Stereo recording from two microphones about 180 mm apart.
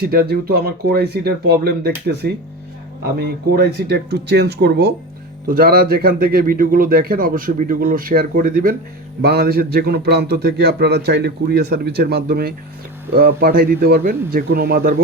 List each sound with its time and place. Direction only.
0.0 s a man's voice: 60° right (ahead or behind)
5.5 s a man's voice: 55° right (ahead or behind)